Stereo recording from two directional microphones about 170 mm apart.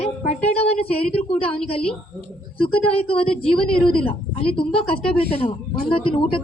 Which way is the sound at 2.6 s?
35° left (ahead or behind).